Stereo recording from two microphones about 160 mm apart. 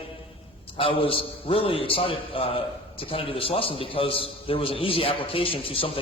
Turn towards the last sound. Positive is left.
turn(degrees=35)  # may be behind; listen again after turning